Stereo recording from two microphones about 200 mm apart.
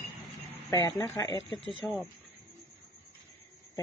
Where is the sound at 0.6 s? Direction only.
15° left (ahead or behind).